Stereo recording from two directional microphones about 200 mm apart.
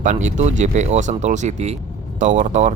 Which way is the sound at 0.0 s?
35° right (ahead or behind).